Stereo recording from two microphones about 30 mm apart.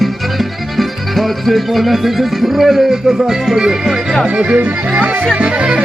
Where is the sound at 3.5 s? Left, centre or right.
Right.